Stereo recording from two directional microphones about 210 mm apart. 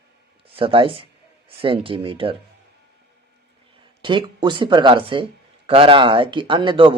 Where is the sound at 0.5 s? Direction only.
25° right (ahead or behind).